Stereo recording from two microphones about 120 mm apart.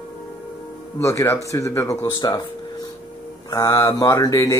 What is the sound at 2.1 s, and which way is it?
Music, 35° left (ahead or behind).